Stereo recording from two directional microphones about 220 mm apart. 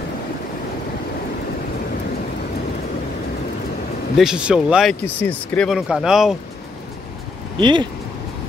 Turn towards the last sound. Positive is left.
turn(degrees=-20)  # may be behind; listen again after turning